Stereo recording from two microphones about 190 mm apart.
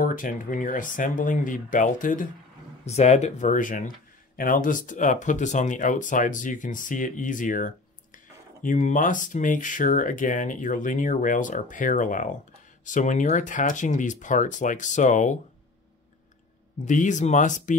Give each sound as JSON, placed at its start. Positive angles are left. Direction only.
{"t": 0.0, "sound": "speech", "side_deg": 45}
{"t": 16.8, "sound": "speech", "side_deg": 40}